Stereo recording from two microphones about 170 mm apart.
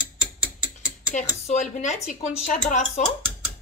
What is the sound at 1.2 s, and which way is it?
Speech, 45° left (ahead or behind).